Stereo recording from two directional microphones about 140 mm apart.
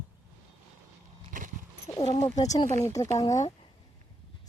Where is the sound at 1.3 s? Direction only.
70° right (ahead or behind).